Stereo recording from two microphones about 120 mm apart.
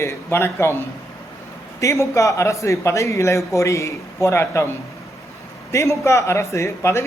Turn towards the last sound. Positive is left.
turn(degrees=20)  # may be behind; listen again after turning